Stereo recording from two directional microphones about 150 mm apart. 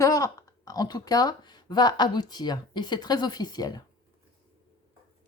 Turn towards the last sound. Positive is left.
turn(degrees=25)  # may be behind; listen again after turning